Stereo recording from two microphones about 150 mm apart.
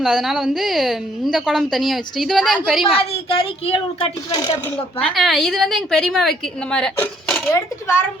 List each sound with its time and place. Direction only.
0.0 s a woman's voice: centre (ahead or behind)
3.1 s a woman's voice: 40° left (ahead or behind)
4.3 s speech: 25° left (ahead or behind)
5.1 s a woman's voice: centre (ahead or behind); by 8.0 s 15° left (ahead or behind)